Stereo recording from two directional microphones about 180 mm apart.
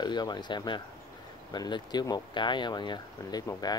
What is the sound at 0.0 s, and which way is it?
Speech, 25° left (ahead or behind).